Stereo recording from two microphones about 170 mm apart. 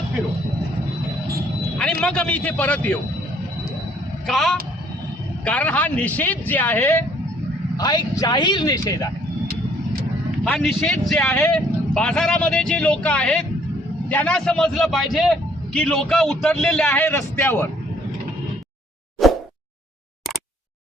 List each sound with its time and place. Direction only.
1.8 s a man's voice: 5° left (ahead or behind)
4.3 s a man's voice: centre (ahead or behind)
7.8 s speech: 25° left (ahead or behind)
10.4 s a man's voice: 5° left (ahead or behind)
19.2 s plop: centre (ahead or behind)